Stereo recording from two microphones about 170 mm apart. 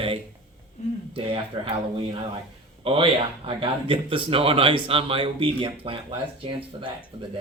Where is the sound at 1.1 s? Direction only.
30° right (ahead or behind).